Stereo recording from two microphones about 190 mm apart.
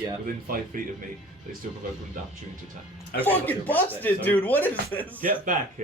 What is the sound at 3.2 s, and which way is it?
Speech, 10° left (ahead or behind).